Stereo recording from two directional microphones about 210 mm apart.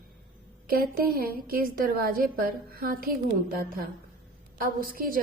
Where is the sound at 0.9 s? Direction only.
45° right (ahead or behind).